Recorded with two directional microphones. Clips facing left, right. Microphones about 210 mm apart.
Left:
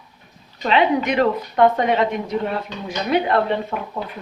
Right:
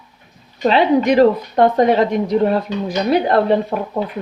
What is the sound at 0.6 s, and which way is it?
Speech, 35° right (ahead or behind).